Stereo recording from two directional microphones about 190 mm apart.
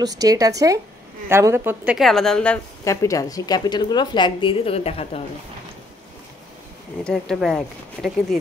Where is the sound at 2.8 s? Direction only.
15° left (ahead or behind); by 5.2 s 30° left (ahead or behind).